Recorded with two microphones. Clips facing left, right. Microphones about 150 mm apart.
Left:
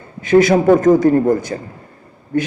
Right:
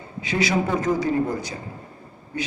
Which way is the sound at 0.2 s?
50° left (ahead or behind).